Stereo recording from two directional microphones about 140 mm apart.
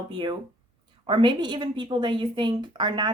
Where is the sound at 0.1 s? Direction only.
35° right (ahead or behind).